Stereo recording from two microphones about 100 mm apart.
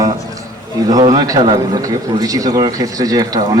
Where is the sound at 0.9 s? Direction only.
40° right (ahead or behind).